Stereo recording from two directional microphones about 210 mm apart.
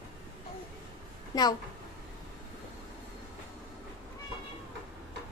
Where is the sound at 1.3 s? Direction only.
20° left (ahead or behind).